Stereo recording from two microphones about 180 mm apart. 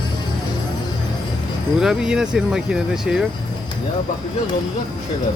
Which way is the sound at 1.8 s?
5° right (ahead or behind).